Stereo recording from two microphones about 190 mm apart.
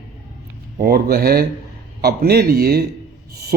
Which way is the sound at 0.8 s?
55° right (ahead or behind).